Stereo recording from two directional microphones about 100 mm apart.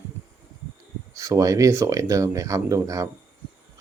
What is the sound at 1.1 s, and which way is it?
Speech, 35° right (ahead or behind).